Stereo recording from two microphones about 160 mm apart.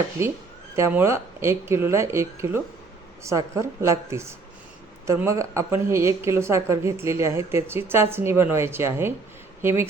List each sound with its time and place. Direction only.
0.2 s speech: 15° right (ahead or behind)